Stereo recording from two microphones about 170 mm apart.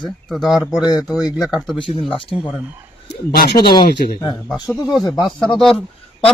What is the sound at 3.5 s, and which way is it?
Speech, 25° left (ahead or behind).